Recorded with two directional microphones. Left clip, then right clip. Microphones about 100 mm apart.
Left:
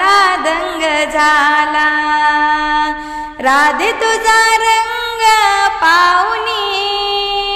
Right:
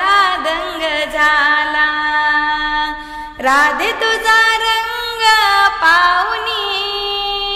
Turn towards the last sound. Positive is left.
turn(degrees=40)  # may be behind; listen again after turning